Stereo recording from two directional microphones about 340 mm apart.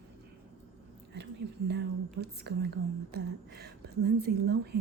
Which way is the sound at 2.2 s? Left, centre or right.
Right.